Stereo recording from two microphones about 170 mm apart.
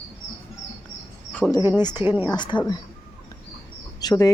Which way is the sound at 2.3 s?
25° left (ahead or behind).